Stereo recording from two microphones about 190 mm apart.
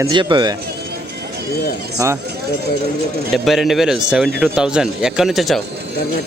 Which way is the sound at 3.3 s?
Centre (ahead or behind).